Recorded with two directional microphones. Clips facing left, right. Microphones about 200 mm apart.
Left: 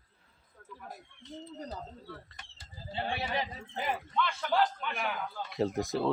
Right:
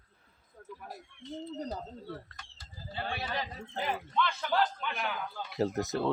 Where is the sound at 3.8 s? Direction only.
5° left (ahead or behind).